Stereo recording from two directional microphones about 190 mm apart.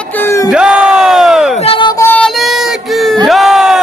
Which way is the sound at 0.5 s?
5° right (ahead or behind).